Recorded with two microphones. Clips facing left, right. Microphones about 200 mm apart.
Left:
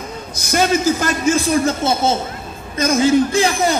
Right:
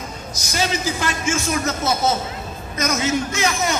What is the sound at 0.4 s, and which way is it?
A man's voice, 55° left (ahead or behind).